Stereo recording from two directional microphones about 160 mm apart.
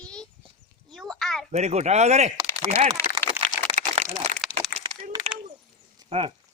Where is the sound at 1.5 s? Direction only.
45° right (ahead or behind).